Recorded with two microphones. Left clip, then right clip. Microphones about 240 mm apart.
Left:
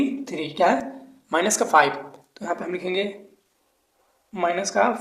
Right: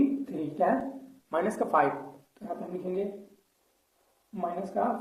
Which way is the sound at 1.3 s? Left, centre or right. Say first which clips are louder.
Left 8 dB; left.